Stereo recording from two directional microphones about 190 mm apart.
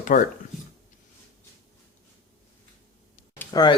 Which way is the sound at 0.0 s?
45° left (ahead or behind).